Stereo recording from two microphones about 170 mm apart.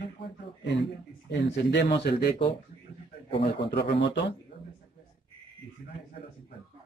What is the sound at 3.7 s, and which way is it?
Speech, 85° left.